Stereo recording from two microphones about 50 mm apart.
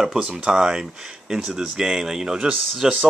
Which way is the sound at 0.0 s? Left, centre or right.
Centre.